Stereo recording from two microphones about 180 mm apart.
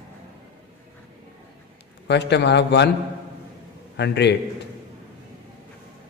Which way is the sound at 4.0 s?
70° left (ahead or behind).